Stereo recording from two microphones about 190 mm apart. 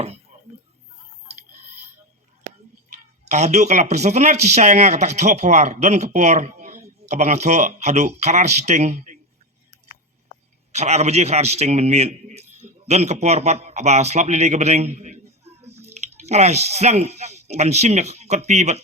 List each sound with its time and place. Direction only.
3.2 s a man's voice: 35° right (ahead or behind)
10.7 s a man's voice: 35° right (ahead or behind)